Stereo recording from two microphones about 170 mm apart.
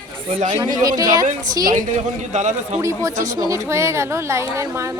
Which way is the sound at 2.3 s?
45° right (ahead or behind).